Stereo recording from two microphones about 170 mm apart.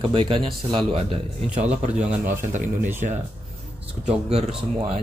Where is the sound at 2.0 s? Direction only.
10° right (ahead or behind).